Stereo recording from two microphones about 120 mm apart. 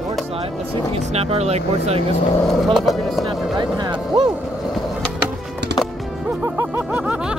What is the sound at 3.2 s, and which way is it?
Music, 35° right (ahead or behind).